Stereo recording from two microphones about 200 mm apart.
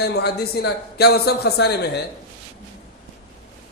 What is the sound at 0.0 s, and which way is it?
Speech, 55° left (ahead or behind).